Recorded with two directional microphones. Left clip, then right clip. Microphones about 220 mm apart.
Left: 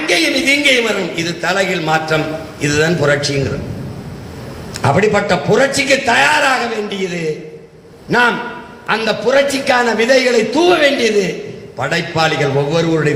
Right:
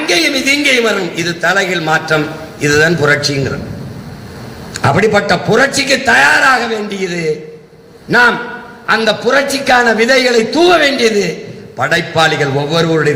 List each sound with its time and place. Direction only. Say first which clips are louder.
0.0 s a man's voice: right 1 dB; 40° right (ahead or behind)
4.8 s a man's voice: right 2 dB; 40° right (ahead or behind)
8.9 s a man's voice: right 3 dB; 40° right (ahead or behind)